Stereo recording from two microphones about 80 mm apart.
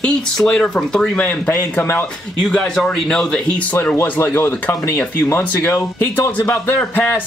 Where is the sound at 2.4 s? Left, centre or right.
Centre.